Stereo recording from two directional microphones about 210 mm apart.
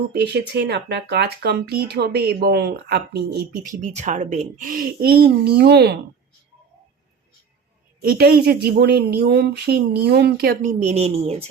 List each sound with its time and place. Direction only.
0.1 s speech: 50° right (ahead or behind)
3.8 s speech: 35° right (ahead or behind); by 6.0 s 50° right (ahead or behind)
8.0 s speech: 45° right (ahead or behind); by 11.4 s 30° right (ahead or behind)